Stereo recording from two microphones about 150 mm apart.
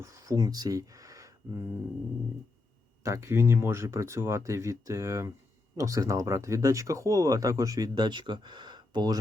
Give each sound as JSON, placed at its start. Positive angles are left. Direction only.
{"t": 0.0, "sound": "speech", "side_deg": -20}
{"t": 3.0, "sound": "speech", "side_deg": -20}